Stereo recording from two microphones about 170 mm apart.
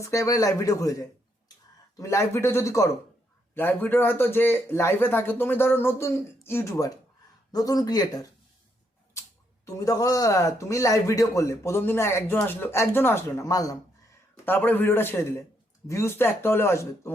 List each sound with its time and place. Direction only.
0.0 s speech: 20° left (ahead or behind)
9.6 s speech: 20° left (ahead or behind)